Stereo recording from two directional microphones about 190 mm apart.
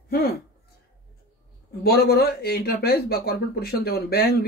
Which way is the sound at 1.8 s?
55° left (ahead or behind).